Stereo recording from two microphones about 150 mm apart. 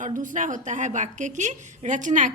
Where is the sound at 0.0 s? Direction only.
60° right (ahead or behind).